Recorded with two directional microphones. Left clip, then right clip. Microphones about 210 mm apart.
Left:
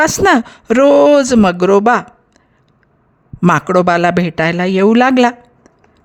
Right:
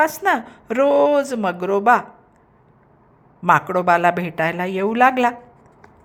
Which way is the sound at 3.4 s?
35° left (ahead or behind).